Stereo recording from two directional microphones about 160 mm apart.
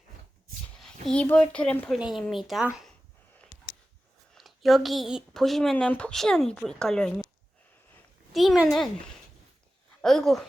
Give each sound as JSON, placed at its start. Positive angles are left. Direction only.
{"t": 0.8, "sound": "a woman's voice", "side_deg": 5}
{"t": 4.4, "sound": "speech", "side_deg": 0}
{"t": 8.3, "sound": "speech", "side_deg": 0}
{"t": 10.0, "sound": "speech", "side_deg": 0}